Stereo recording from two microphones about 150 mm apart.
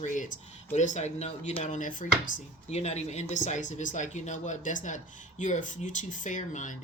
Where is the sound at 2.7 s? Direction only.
45° left (ahead or behind).